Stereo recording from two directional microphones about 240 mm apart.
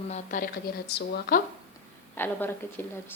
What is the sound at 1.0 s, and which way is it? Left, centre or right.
Speech, left.